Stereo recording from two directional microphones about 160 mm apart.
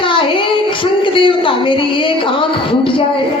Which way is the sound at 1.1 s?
30° left (ahead or behind).